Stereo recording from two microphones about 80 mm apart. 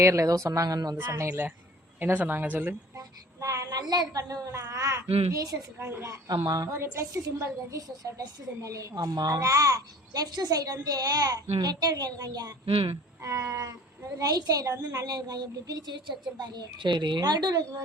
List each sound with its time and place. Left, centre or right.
0.0 s a child's voice: right
1.1 s a woman's voice: right
3.0 s child singing: right
4.2 s a child's voice: right
6.2 s a child's voice: right
6.7 s a child's voice: right
14.2 s a woman's voice: right